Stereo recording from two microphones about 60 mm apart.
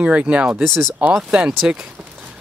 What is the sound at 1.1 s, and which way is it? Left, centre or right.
Speech, centre.